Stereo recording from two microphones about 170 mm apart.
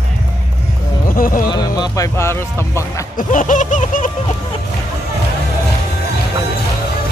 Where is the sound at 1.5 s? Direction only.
25° left (ahead or behind).